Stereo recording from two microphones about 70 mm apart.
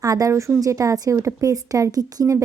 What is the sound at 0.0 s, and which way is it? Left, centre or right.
Speech, right.